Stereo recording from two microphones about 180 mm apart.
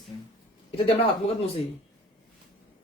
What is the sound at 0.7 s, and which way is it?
Speech, 35° left (ahead or behind).